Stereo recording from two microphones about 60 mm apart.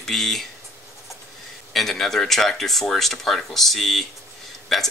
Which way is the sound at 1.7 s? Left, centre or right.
Centre.